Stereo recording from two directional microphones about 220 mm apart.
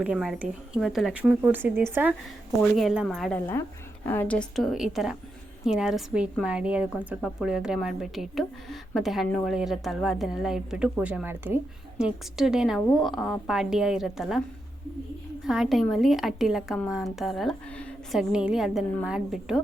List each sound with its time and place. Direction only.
0.0 s a woman's voice: 5° right (ahead or behind)
15.4 s a woman's voice: centre (ahead or behind)